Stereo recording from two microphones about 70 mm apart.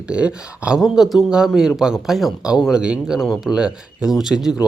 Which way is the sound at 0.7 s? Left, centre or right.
Centre.